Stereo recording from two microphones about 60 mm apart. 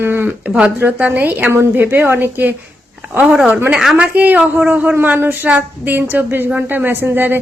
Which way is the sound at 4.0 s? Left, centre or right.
Right.